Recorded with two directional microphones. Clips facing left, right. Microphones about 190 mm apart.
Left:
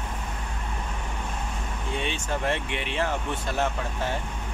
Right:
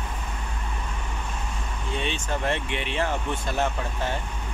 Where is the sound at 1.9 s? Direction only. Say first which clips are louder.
Right 1 dB; 10° left (ahead or behind).